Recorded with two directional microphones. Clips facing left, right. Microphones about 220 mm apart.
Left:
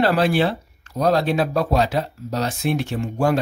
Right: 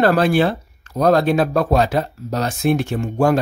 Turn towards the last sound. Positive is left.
turn(degrees=-50)  # may be behind; listen again after turning